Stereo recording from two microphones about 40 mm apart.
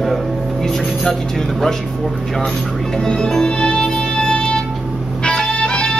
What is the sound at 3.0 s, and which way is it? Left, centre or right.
Music, centre.